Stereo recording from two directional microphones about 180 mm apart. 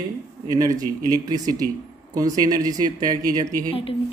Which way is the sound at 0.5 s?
20° right (ahead or behind).